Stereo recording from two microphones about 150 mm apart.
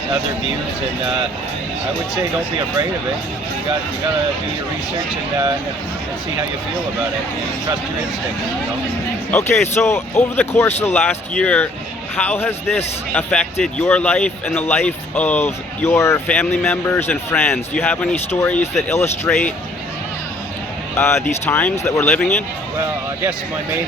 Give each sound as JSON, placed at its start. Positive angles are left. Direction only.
{"t": 9.3, "sound": "speech", "side_deg": 15}
{"t": 21.0, "sound": "speech", "side_deg": 15}